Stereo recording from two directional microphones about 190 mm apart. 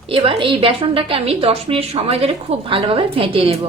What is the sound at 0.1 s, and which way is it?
A woman's voice, 25° right (ahead or behind).